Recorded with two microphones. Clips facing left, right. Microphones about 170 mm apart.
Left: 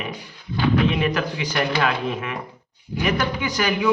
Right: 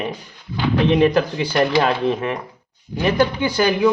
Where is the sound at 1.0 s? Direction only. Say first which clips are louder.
Right 7 dB; 35° right (ahead or behind).